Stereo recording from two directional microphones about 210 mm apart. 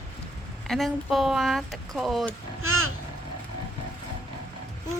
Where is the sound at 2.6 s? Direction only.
80° right.